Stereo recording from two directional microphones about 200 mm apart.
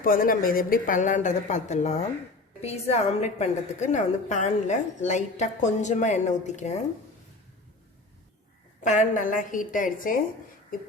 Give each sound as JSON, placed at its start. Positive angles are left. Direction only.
{"t": 0.0, "sound": "a woman's voice", "side_deg": 45}
{"t": 8.8, "sound": "a woman's voice", "side_deg": 40}